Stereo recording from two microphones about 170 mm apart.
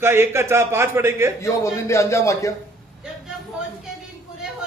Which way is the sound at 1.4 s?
15° left (ahead or behind).